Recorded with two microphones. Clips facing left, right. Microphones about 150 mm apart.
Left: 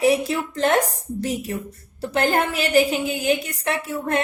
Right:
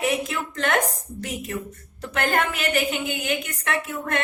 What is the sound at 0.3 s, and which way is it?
A woman's voice, 35° left (ahead or behind).